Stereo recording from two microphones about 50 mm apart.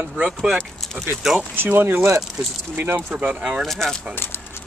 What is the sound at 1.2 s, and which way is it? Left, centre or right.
Speech, centre.